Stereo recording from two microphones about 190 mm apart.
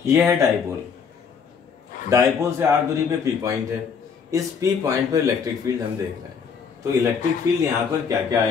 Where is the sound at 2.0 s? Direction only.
15° right (ahead or behind).